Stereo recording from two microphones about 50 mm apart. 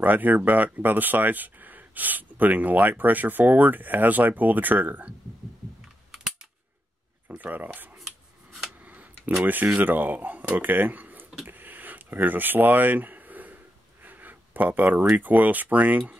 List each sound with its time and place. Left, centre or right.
0.0 s speech: right
7.2 s speech: right
8.8 s a sound: right
9.4 s speech: right
11.4 s a sound: right
15.1 s speech: right